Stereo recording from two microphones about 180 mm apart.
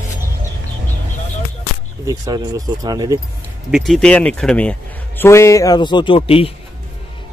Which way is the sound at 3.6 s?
Centre (ahead or behind).